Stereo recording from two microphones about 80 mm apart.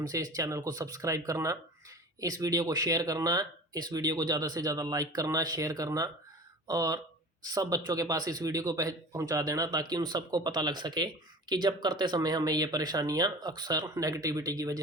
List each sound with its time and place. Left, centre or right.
0.0 s speech: right
9.6 s speech: right